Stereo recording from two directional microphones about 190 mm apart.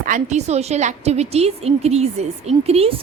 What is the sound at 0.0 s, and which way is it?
A woman's voice, 40° right (ahead or behind).